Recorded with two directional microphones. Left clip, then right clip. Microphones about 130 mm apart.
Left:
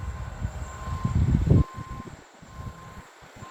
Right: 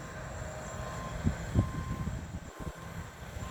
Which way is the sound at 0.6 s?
15° left (ahead or behind).